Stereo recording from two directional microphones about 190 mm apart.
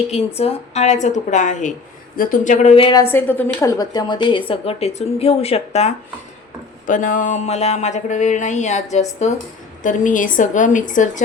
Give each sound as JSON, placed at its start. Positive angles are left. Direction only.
{"t": 0.3, "sound": "speech", "side_deg": 35}
{"t": 3.0, "sound": "a woman's voice", "side_deg": 10}